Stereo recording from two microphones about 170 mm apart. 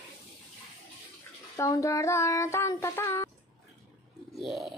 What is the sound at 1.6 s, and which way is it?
Child singing, 20° left (ahead or behind).